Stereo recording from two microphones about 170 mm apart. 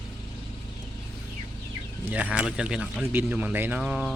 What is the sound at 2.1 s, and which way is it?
Speech, 10° right (ahead or behind).